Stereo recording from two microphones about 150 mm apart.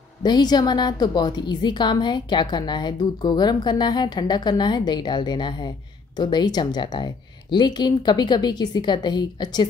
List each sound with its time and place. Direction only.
0.2 s a woman's voice: 30° left (ahead or behind)